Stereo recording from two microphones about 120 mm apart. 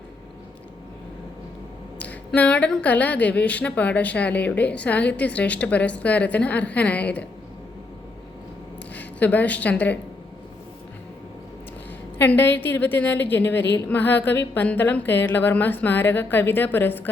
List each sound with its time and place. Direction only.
2.0 s a woman's voice: 10° left (ahead or behind)
9.0 s a woman's voice: 15° left (ahead or behind)
12.1 s a woman's voice: 15° left (ahead or behind)